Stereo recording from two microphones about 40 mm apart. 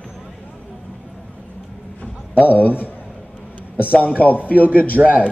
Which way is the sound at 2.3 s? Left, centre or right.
Left.